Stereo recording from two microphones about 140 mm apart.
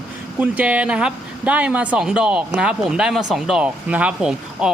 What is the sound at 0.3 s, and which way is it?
Speech, 10° right (ahead or behind).